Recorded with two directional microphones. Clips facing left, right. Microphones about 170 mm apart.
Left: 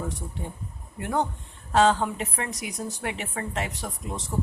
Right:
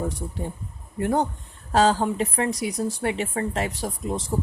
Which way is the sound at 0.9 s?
40° right (ahead or behind).